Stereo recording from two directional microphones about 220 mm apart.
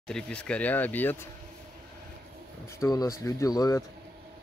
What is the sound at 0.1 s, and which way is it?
Speech, 5° left (ahead or behind).